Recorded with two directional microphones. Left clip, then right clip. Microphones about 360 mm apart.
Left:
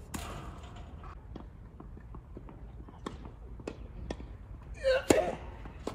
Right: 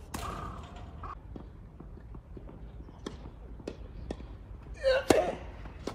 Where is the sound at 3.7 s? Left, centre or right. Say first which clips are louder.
Even; centre.